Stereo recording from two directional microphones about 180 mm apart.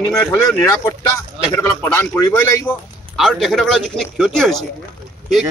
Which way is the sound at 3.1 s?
Centre (ahead or behind).